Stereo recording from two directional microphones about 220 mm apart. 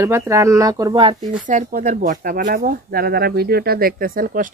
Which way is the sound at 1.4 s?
35° right (ahead or behind).